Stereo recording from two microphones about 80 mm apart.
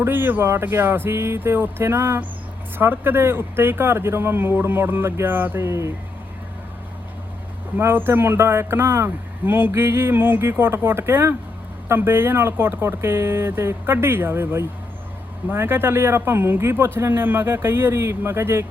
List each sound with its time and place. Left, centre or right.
0.0 s speech: right
7.8 s speech: right